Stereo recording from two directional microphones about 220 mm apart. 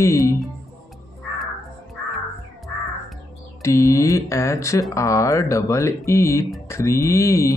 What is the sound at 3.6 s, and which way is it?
Speech, 15° left (ahead or behind).